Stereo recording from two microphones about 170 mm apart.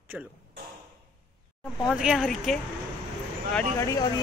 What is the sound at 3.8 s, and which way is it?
Speech, 20° left (ahead or behind).